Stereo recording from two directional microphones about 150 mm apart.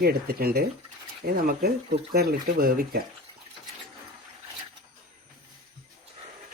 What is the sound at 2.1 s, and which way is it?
Speech, 90° right.